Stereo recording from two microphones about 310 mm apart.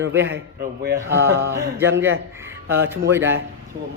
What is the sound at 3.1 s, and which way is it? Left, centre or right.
Speech, centre.